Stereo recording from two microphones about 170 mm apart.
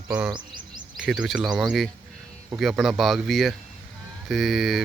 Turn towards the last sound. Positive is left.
turn(degrees=0)  # may be behind; listen again after turning